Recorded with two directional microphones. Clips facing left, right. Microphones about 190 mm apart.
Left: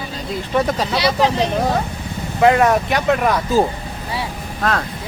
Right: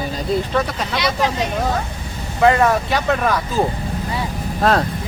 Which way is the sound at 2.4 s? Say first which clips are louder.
Left 1 dB; 15° left (ahead or behind).